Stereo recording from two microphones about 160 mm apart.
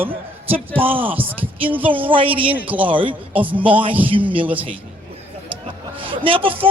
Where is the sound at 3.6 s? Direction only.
35° right (ahead or behind).